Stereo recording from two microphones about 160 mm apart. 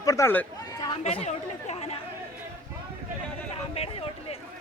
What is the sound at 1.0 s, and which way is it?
Speech, 45° left (ahead or behind).